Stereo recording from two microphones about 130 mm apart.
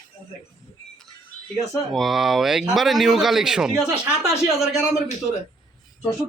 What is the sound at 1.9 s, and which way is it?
A man's voice, centre (ahead or behind).